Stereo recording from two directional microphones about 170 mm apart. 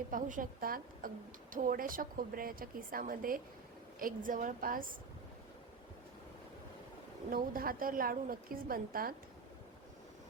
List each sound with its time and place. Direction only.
0.1 s a woman's voice: 50° right (ahead or behind)
7.3 s a woman's voice: 60° right (ahead or behind)